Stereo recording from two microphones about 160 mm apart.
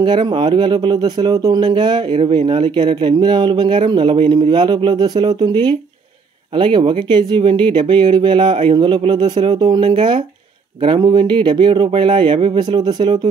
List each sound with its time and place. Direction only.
0.0 s speech: 30° right (ahead or behind)